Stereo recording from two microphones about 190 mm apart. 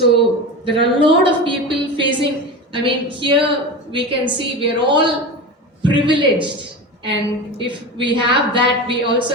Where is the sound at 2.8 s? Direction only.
25° right (ahead or behind).